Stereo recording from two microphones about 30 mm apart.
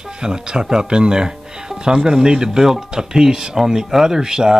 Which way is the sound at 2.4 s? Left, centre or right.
Centre.